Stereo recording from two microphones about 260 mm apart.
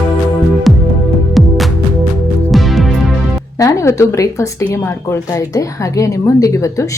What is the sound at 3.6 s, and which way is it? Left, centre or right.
Speech, centre.